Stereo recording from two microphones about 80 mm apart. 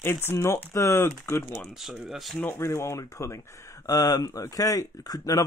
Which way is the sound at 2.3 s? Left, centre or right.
Left.